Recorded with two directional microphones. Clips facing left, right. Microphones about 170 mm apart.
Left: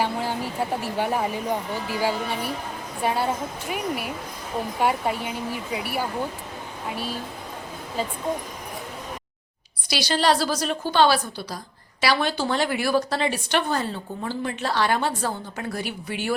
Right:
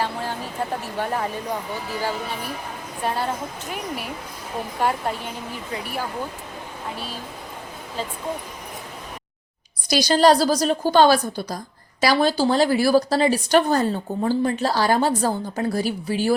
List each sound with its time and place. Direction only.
0.0 s speech: 10° left (ahead or behind)
4.8 s a woman's voice: 5° left (ahead or behind)
9.9 s a woman's voice: 40° right (ahead or behind)